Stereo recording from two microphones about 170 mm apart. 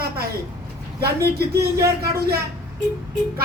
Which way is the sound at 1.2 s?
70° right (ahead or behind).